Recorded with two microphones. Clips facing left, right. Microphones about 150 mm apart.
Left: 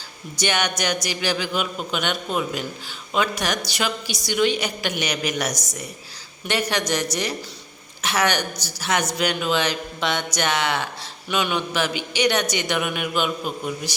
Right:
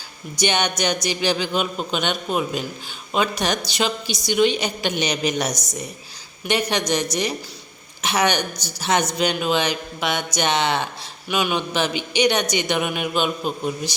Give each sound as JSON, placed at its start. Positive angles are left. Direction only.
{"t": 0.3, "sound": "a woman's voice", "side_deg": -20}
{"t": 11.3, "sound": "speech", "side_deg": -10}
{"t": 11.5, "sound": "a woman's voice", "side_deg": -20}